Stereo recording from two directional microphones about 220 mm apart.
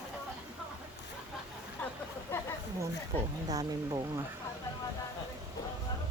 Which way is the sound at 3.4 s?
15° right (ahead or behind).